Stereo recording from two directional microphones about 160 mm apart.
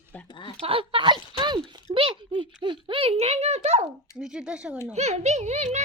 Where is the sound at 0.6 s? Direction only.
35° right (ahead or behind).